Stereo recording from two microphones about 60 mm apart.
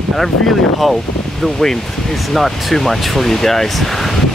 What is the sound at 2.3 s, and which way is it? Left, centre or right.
Speech, centre.